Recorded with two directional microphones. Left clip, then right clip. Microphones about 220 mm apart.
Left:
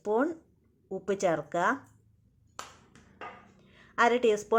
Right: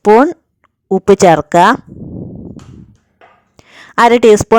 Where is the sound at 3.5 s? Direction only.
50° right (ahead or behind).